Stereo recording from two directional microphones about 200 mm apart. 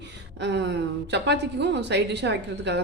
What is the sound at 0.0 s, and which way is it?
Speech, 60° right (ahead or behind).